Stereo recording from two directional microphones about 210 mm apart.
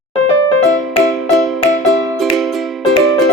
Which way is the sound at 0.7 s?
Centre (ahead or behind).